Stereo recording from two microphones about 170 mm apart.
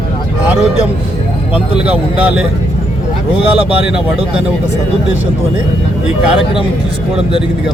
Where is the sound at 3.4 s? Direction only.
35° right (ahead or behind).